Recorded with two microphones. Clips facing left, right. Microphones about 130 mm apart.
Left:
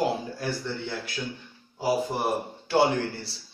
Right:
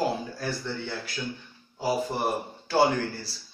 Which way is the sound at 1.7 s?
10° left (ahead or behind).